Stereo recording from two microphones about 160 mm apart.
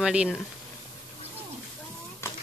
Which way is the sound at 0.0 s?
5° right (ahead or behind).